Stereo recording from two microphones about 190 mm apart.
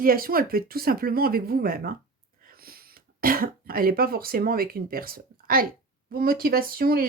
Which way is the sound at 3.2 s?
50° right (ahead or behind).